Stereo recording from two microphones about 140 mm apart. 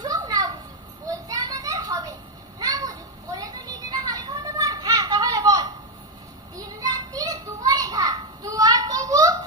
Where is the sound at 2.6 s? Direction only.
25° right (ahead or behind).